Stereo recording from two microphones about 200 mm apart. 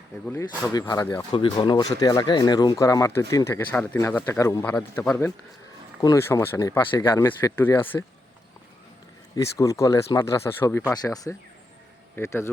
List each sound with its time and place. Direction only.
0.3 s speech: 15° left (ahead or behind)
9.3 s speech: 15° left (ahead or behind)